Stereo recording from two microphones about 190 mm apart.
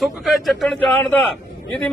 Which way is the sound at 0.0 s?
Centre (ahead or behind).